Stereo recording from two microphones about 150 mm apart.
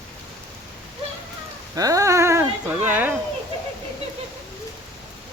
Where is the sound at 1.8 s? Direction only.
20° right (ahead or behind).